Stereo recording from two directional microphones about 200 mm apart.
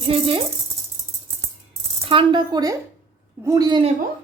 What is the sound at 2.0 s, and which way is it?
A woman's voice, 25° right (ahead or behind).